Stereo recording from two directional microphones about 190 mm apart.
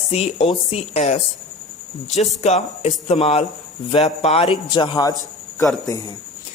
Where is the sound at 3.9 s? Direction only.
35° left (ahead or behind).